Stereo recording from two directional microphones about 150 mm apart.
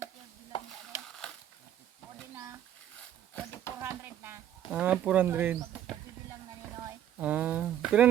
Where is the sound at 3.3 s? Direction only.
15° left (ahead or behind).